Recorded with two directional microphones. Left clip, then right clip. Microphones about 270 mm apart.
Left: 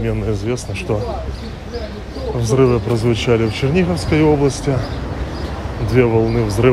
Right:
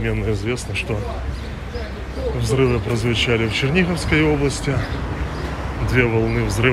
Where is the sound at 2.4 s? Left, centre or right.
Left.